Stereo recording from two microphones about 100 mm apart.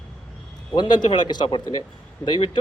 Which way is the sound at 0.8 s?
50° left (ahead or behind).